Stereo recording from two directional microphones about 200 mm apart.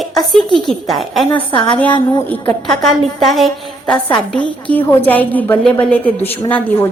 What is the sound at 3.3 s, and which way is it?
A woman's voice, centre (ahead or behind).